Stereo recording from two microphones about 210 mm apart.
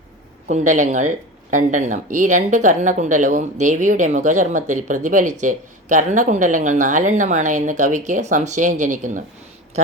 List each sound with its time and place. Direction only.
0.4 s speech: 35° right (ahead or behind)